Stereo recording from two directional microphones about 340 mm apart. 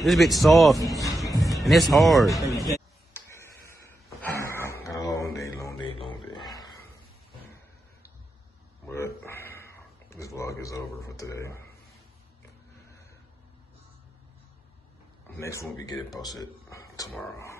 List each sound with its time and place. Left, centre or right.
0.0 s a man's voice: centre
1.0 s music: centre
2.7 s a sound: centre
6.5 s grunt: centre
8.8 s a sound: centre
15.3 s speech: centre